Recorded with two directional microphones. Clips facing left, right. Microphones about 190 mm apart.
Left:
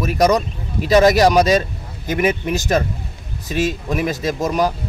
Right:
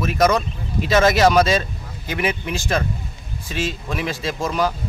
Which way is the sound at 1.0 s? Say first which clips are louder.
Left 1 dB; 35° left (ahead or behind).